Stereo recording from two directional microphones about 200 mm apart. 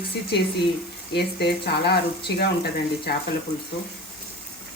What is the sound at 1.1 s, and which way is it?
Speech, 55° left (ahead or behind).